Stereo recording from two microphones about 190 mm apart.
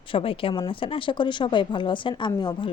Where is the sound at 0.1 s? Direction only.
30° left (ahead or behind).